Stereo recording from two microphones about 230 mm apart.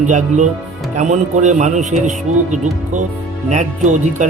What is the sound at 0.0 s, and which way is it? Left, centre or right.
Speech, right.